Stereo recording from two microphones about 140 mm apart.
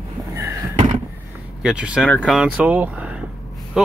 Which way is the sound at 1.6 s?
10° right (ahead or behind).